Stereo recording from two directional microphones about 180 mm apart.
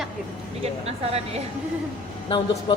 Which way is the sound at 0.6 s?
35° right (ahead or behind).